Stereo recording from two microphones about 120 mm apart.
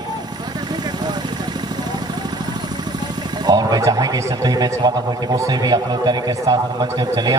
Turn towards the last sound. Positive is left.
turn(degrees=-35)  # may be behind; listen again after turning